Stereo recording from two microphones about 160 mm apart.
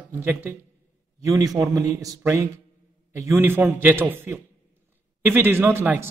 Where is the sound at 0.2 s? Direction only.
15° right (ahead or behind).